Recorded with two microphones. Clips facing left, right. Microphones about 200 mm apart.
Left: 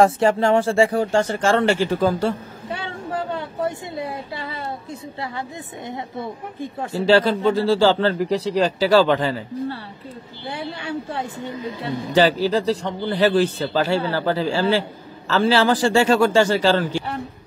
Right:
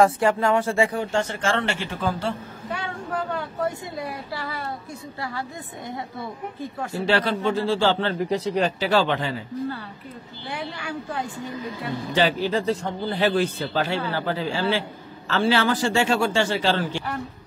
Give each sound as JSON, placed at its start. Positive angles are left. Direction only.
{"t": 0.0, "sound": "speech", "side_deg": 25}
{"t": 2.8, "sound": "a sound", "side_deg": 30}
{"t": 3.6, "sound": "speech", "side_deg": 20}
{"t": 5.9, "sound": "speech", "side_deg": 20}
{"t": 10.5, "sound": "speech", "side_deg": 25}
{"t": 12.1, "sound": "speech", "side_deg": 35}